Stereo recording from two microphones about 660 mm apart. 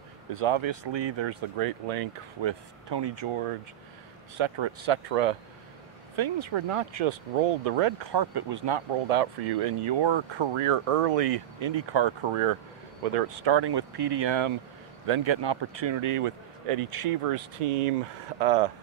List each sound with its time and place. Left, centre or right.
0.3 s speech: right
2.4 s speech: right
6.1 s speech: right
8.1 s speech: right
9.1 s speech: right
17.6 s speech: right